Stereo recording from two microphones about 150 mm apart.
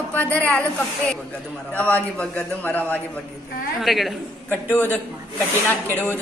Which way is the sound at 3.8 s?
Centre (ahead or behind).